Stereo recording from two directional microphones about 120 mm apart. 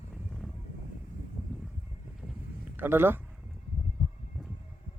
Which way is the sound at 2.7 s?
20° right (ahead or behind).